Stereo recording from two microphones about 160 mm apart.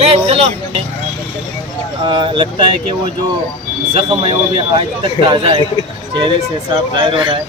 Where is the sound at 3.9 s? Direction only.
40° right (ahead or behind).